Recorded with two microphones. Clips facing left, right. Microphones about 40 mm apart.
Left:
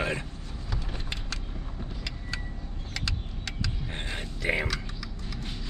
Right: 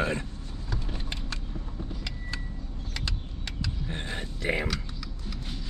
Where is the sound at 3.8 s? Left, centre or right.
Left.